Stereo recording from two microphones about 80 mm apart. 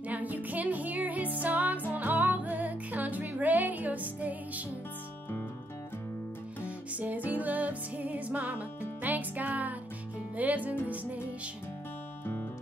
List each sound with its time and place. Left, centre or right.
0.1 s music: right
6.6 s music: centre